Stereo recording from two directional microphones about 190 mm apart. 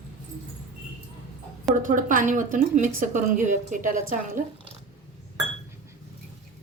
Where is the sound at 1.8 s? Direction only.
45° right (ahead or behind).